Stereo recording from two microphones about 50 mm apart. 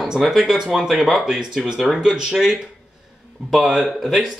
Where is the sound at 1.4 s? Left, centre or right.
Centre.